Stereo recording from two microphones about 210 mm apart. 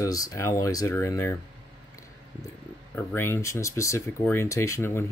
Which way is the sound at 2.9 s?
10° left (ahead or behind).